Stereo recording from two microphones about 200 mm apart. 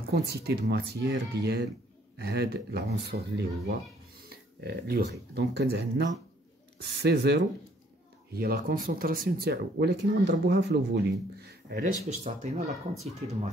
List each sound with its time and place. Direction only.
0.1 s speech: 55° right (ahead or behind)
4.3 s a sound: 50° right (ahead or behind)
5.3 s speech: 55° right (ahead or behind)
12.2 s speech: 35° right (ahead or behind)